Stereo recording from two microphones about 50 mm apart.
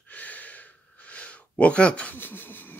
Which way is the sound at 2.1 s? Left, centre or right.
Left.